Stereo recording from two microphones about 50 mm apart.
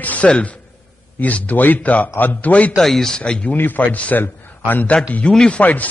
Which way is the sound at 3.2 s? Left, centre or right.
Left.